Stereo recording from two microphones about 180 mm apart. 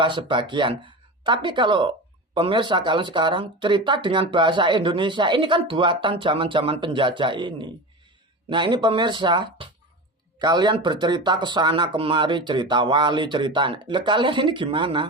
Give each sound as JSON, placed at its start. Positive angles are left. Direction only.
{"t": 0.0, "sound": "speech", "side_deg": -25}